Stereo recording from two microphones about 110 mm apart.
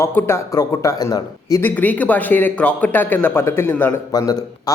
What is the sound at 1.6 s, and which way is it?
Speech, 15° left (ahead or behind).